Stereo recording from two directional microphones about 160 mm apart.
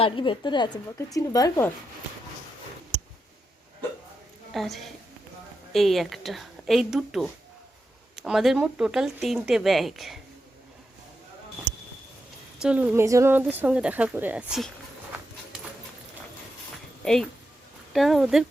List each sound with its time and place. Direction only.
0.0 s speech: 30° left (ahead or behind)
4.5 s speech: centre (ahead or behind)
12.5 s speech: 5° right (ahead or behind)
17.0 s speech: 5° left (ahead or behind)